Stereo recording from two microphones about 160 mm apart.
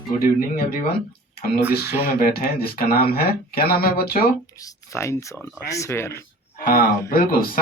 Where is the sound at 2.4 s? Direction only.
70° left (ahead or behind).